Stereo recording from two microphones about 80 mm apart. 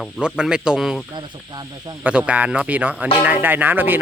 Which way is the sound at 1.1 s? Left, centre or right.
Right.